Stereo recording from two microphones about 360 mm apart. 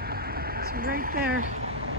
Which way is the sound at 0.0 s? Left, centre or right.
Right.